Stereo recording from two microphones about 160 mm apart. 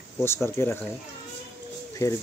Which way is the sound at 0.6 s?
15° left (ahead or behind).